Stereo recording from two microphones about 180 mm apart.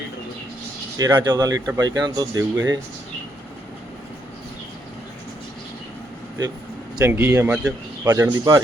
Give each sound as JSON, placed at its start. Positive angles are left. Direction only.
{"t": 0.9, "sound": "speech", "side_deg": -20}
{"t": 7.0, "sound": "speech", "side_deg": -10}